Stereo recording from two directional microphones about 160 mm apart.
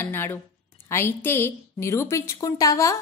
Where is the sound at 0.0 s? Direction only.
15° left (ahead or behind).